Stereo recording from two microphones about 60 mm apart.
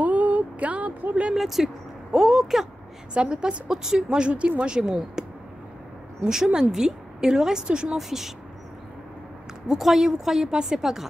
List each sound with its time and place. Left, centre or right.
0.0 s a sound: right
1.3 s a woman's voice: centre
3.2 s speech: centre
6.2 s speech: centre
9.7 s a woman's voice: centre